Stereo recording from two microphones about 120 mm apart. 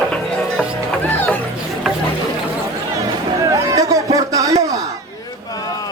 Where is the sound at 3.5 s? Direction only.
25° right (ahead or behind).